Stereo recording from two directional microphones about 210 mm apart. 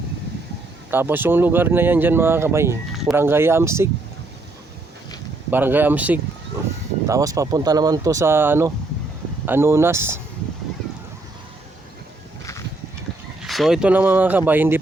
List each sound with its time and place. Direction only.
0.9 s speech: 10° right (ahead or behind)
5.5 s speech: 10° right (ahead or behind)
13.4 s speech: centre (ahead or behind)